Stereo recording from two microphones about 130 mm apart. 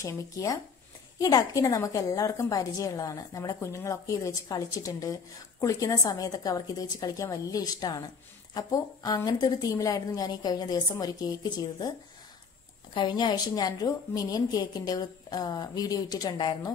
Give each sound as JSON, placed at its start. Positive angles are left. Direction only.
{"t": 0.0, "sound": "a woman's voice", "side_deg": 25}
{"t": 12.9, "sound": "a woman's voice", "side_deg": 35}